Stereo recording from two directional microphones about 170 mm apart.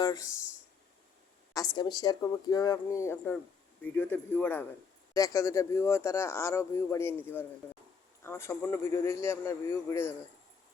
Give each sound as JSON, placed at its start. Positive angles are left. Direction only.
{"t": 0.0, "sound": "speech", "side_deg": 20}
{"t": 1.5, "sound": "speech", "side_deg": 25}